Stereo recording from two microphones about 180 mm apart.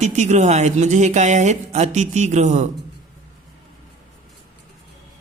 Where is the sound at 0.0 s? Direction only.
40° right (ahead or behind).